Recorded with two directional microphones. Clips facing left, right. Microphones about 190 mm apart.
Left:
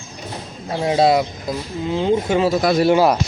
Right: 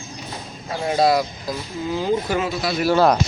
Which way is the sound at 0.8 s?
25° left (ahead or behind).